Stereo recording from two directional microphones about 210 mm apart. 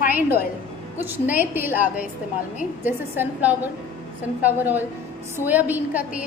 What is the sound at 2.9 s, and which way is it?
A woman's voice, 10° right (ahead or behind).